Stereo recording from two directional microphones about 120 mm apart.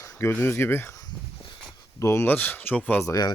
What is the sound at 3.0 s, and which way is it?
Speech, 30° left (ahead or behind).